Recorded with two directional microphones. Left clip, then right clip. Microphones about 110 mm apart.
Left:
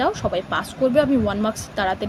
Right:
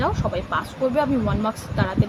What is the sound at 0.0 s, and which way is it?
Speech, 40° left (ahead or behind).